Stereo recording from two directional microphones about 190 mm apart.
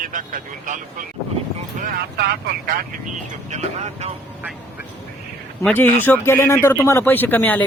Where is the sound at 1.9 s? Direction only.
60° right (ahead or behind).